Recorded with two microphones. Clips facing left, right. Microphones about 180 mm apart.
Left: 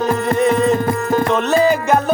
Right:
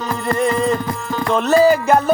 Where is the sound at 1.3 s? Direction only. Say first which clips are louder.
Right 5 dB; centre (ahead or behind).